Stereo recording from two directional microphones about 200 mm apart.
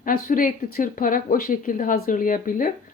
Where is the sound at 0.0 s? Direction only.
45° left (ahead or behind).